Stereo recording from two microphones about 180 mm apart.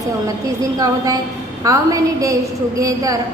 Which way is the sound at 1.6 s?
20° right (ahead or behind).